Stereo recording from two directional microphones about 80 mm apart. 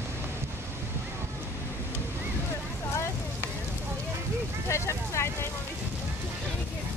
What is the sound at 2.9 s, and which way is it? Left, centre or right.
Vehicle, left.